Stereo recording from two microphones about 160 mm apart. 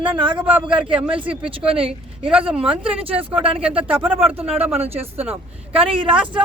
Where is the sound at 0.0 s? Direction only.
30° right (ahead or behind).